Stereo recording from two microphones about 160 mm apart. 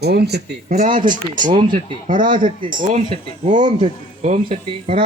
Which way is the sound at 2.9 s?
45° right (ahead or behind).